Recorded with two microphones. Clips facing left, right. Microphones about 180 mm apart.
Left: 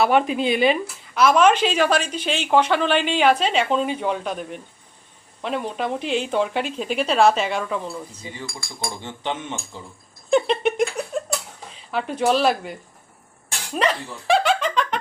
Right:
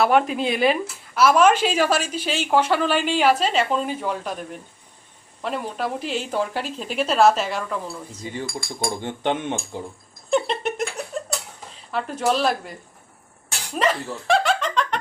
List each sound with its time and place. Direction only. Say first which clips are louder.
0.0 s a woman's voice: even; centre (ahead or behind)
5.4 s a woman's voice: left 1 dB; centre (ahead or behind)
9.0 s speech: right 4 dB; 55° right (ahead or behind)
10.2 s a woman's voice: left 3 dB; centre (ahead or behind)
13.7 s giggle: even; centre (ahead or behind)